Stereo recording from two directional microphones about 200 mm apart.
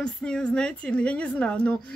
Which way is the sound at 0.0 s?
5° left (ahead or behind).